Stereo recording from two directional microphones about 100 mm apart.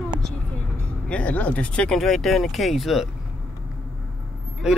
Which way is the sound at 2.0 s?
Centre (ahead or behind).